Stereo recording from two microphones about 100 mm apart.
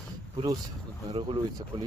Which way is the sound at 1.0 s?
60° right (ahead or behind).